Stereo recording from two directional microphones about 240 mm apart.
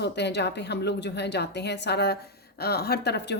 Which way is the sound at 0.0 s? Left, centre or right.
Left.